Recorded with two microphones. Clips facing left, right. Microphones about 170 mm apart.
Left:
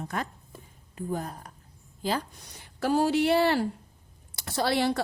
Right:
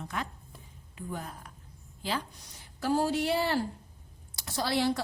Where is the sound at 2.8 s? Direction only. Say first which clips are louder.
Left 4 dB; 70° left (ahead or behind).